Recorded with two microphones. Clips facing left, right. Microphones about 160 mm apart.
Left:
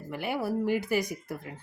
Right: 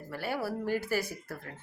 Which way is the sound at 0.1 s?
15° left (ahead or behind).